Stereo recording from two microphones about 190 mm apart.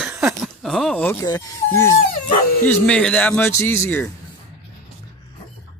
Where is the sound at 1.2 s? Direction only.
20° left (ahead or behind).